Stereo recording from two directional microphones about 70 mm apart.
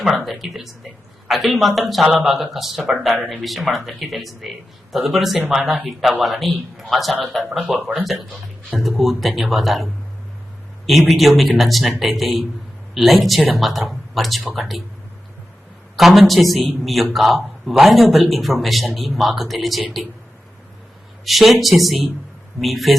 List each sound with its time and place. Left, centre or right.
0.0 s speech: centre
7.7 s speech: right
8.3 s speech: centre
11.2 s speech: centre
16.0 s speech: centre
21.2 s speech: centre